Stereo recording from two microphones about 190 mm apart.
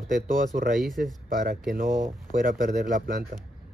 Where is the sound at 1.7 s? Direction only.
45° right (ahead or behind).